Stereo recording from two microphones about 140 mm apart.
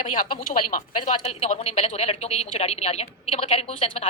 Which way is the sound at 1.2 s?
50° left (ahead or behind).